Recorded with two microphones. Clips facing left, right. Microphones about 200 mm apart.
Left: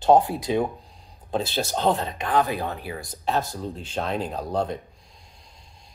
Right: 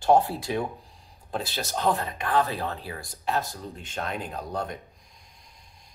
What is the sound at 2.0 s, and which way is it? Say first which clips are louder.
Speech: left 2 dB; 20° left (ahead or behind).